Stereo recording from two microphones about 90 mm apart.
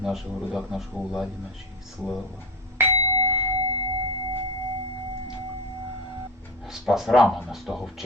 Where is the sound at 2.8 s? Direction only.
25° right (ahead or behind).